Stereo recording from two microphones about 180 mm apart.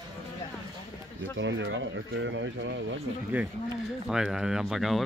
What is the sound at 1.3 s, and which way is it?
Speech, 90° right.